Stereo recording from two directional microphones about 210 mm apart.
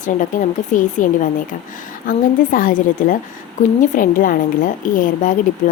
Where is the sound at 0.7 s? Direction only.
35° left (ahead or behind).